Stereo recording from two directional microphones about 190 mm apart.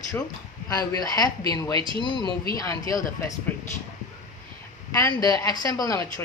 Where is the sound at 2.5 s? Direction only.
20° left (ahead or behind).